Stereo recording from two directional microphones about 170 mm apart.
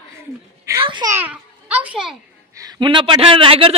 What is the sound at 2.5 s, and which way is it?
A woman's voice, 20° right (ahead or behind).